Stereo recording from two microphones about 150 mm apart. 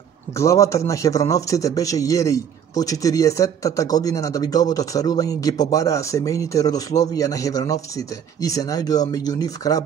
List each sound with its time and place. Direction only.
0.4 s a man's voice: 20° left (ahead or behind)